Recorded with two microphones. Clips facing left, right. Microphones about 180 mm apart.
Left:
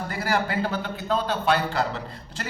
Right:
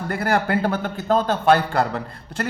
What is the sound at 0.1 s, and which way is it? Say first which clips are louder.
A man's voice: right 6 dB; 55° right (ahead or behind).